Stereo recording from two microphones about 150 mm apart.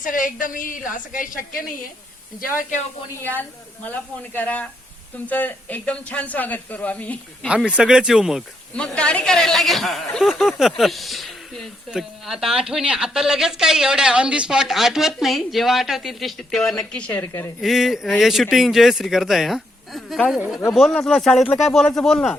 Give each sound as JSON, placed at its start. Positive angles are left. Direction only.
{"t": 0.0, "sound": "a woman's voice", "side_deg": 65}
{"t": 3.2, "sound": "speech", "side_deg": 10}
{"t": 7.4, "sound": "a man's voice", "side_deg": -5}
{"t": 17.6, "sound": "a man's voice", "side_deg": 0}